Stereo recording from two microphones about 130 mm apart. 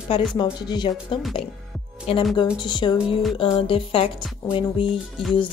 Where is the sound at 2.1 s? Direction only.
50° left (ahead or behind).